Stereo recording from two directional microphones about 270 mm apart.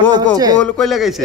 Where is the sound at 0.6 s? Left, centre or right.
Centre.